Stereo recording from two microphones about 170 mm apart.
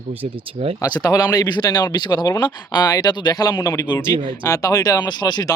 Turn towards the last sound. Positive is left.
turn(degrees=25)  # may be behind; listen again after turning